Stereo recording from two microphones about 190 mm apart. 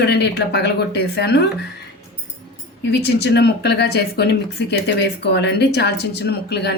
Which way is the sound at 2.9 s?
60° left (ahead or behind).